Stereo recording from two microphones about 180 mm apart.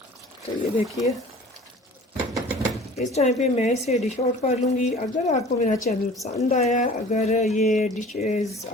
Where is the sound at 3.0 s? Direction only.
40° left (ahead or behind).